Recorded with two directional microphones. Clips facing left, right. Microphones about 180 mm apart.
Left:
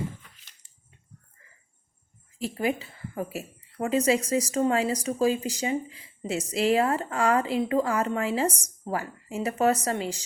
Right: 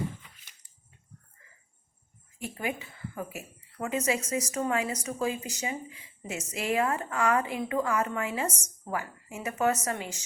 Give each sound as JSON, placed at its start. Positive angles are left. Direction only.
{"t": 2.6, "sound": "a woman's voice", "side_deg": 35}